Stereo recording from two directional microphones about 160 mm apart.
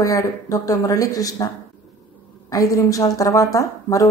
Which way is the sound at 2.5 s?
20° left (ahead or behind).